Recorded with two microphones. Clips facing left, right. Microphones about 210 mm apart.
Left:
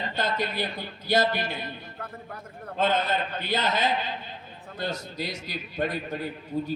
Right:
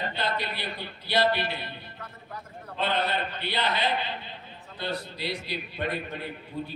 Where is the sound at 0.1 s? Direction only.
45° left (ahead or behind).